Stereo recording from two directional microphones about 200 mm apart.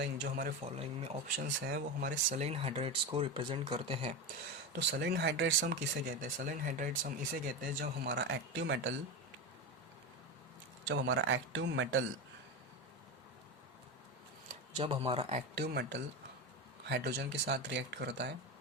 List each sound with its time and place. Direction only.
0.0 s speech: 50° right (ahead or behind)
0.6 s speech: 30° right (ahead or behind)
1.7 s speech: 45° right (ahead or behind)
2.4 s speech: 30° right (ahead or behind)
4.7 s speech: 55° right (ahead or behind)
6.2 s speech: 40° right (ahead or behind)
8.0 s speech: 60° right (ahead or behind)
10.8 s speech: 65° right (ahead or behind)
14.8 s speech: 25° right (ahead or behind)
15.5 s speech: 55° right (ahead or behind)